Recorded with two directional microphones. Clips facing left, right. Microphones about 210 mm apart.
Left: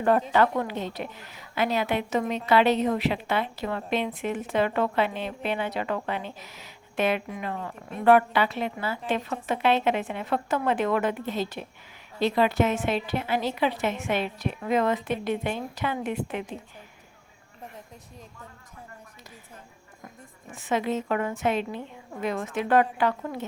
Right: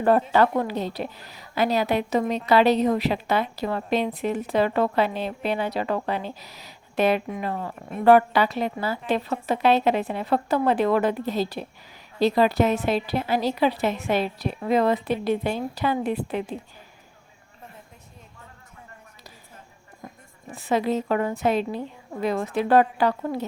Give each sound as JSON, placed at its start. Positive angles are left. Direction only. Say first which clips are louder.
{"t": 0.0, "sound": "speech", "louder": "right 3 dB", "side_deg": -35}
{"t": 20.5, "sound": "speech", "louder": "right 3 dB", "side_deg": -35}